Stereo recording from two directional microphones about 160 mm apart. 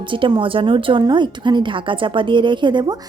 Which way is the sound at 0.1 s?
30° right (ahead or behind).